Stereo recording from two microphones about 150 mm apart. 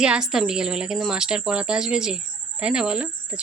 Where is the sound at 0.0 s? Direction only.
5° right (ahead or behind).